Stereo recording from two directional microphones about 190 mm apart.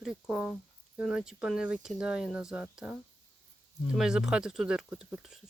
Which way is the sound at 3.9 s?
5° right (ahead or behind).